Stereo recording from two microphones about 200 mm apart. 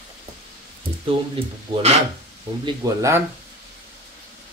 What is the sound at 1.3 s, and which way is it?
Speech, 30° right (ahead or behind).